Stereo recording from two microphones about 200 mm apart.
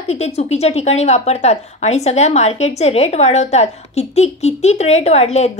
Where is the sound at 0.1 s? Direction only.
35° left (ahead or behind).